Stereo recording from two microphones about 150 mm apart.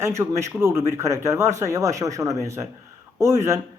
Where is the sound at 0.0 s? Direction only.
20° right (ahead or behind).